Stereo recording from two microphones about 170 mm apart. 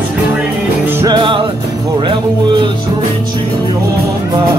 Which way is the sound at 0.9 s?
15° right (ahead or behind).